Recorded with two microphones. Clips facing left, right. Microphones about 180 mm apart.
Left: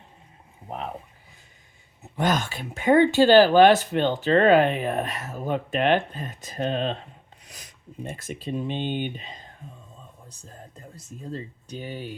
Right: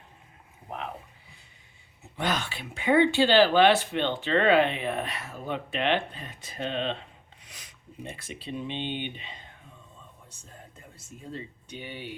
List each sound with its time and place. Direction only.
2.1 s speech: 45° left (ahead or behind)